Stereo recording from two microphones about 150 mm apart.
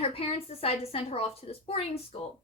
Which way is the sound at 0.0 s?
40° left (ahead or behind).